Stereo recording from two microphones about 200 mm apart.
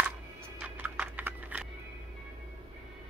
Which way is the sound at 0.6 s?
10° right (ahead or behind).